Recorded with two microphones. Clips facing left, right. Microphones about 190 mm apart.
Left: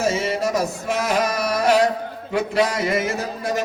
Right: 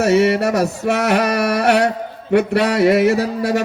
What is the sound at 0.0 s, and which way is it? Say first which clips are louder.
Speech: right 7 dB; 65° right (ahead or behind).